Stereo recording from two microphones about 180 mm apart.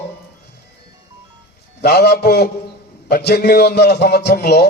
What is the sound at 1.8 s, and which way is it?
A man's voice, 65° left (ahead or behind).